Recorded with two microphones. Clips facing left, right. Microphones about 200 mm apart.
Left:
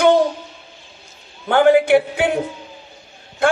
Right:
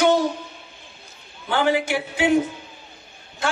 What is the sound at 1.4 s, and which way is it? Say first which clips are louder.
A man's voice: left 8 dB; 55° left (ahead or behind).